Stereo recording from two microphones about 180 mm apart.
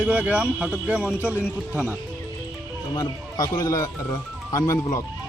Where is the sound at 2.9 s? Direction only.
20° left (ahead or behind).